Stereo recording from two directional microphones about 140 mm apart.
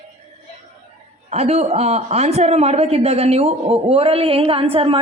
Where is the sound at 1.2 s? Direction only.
50° right (ahead or behind).